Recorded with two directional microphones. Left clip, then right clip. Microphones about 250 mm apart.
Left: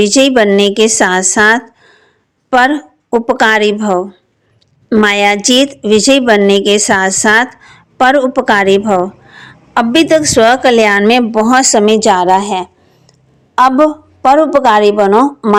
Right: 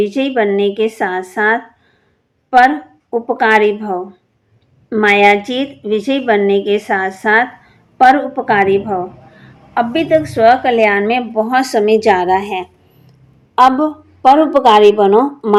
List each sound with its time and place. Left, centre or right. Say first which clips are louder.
0.0 s a woman's voice: left 6 dB; left